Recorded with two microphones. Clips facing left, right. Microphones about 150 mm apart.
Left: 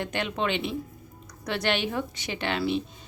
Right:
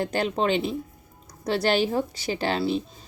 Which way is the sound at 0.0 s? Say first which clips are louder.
Right 4 dB; 35° right (ahead or behind).